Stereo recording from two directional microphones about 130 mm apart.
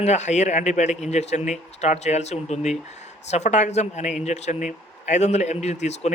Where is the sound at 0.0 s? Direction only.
60° left (ahead or behind).